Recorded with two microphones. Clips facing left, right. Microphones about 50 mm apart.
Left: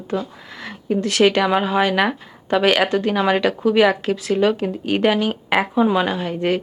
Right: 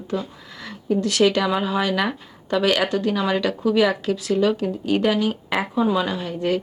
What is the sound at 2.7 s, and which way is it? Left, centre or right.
Speech, centre.